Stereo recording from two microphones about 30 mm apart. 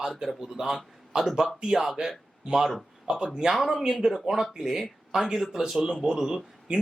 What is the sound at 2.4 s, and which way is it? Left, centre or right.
Speech, right.